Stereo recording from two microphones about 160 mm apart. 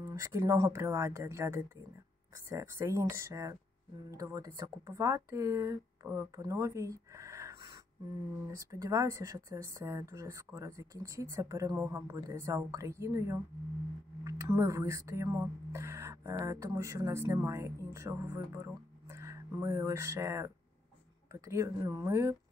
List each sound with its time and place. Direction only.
0.0 s speech: 20° right (ahead or behind)